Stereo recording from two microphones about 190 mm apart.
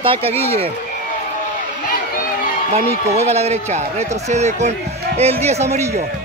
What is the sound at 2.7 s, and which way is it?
Speech, 35° right (ahead or behind).